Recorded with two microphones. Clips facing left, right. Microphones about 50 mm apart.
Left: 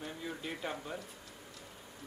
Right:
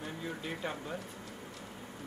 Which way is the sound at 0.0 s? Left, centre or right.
Centre.